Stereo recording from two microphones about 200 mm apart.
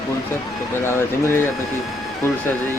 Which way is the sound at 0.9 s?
10° left (ahead or behind).